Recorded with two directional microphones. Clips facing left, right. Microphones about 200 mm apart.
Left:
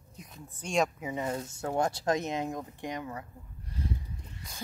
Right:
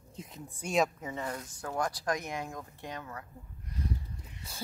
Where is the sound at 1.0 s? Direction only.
15° left (ahead or behind).